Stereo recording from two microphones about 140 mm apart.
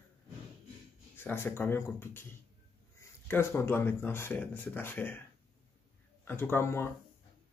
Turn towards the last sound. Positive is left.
turn(degrees=20)  # may be behind; listen again after turning